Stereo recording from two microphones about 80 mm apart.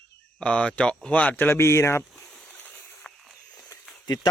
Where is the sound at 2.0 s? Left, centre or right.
Centre.